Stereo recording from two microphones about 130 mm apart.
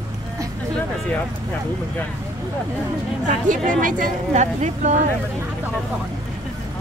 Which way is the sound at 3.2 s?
80° right.